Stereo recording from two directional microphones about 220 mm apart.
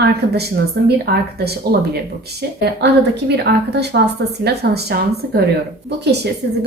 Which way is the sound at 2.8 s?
50° right (ahead or behind).